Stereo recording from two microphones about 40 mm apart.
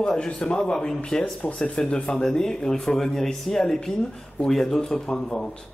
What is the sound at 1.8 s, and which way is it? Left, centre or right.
Speech, left.